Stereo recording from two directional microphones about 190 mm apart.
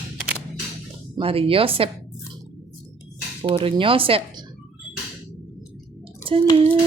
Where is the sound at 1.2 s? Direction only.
30° right (ahead or behind).